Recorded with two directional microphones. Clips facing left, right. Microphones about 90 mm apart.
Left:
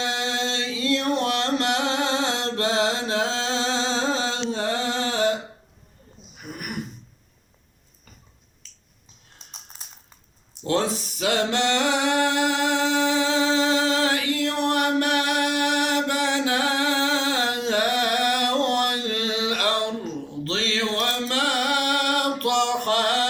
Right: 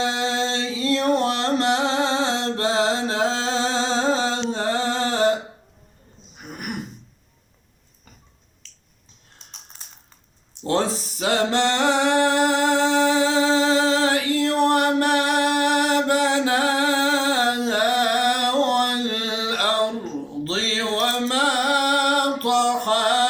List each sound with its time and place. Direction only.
0.0 s music: 30° right (ahead or behind)
10.5 s a sound: 35° right (ahead or behind)
20.4 s music: 30° right (ahead or behind)